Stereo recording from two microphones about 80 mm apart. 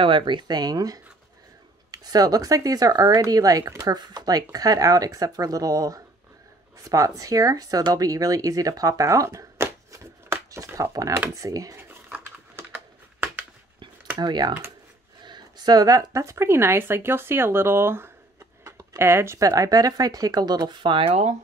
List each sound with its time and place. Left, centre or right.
0.0 s speech: right
4.0 s speech: right
12.6 s a sound: right
14.2 s speech: right